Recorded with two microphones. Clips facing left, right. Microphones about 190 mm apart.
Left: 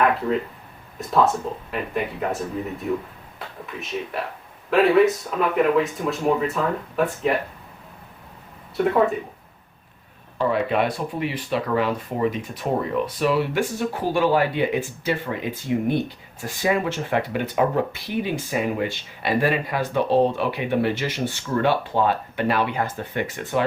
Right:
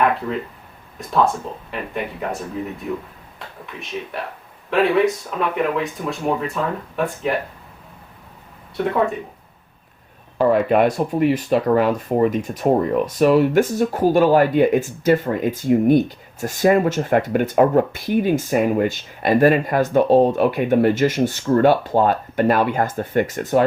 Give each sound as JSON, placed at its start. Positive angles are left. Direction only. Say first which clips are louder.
{"t": 0.9, "sound": "speech", "louder": "right 1 dB", "side_deg": 0}
{"t": 10.3, "sound": "speech", "louder": "right 6 dB", "side_deg": -50}